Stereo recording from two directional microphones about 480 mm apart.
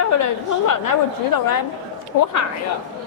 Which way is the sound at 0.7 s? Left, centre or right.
Left.